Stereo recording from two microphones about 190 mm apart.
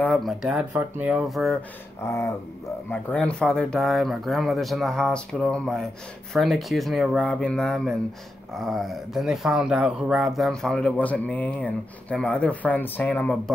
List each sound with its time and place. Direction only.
0.0 s speech: centre (ahead or behind)
2.0 s speech: 15° left (ahead or behind)